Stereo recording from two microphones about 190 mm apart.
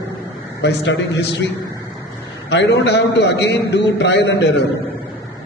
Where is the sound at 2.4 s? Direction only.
65° left (ahead or behind).